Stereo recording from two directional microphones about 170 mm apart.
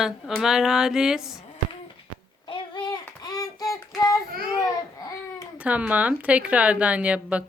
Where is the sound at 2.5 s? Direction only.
25° left (ahead or behind).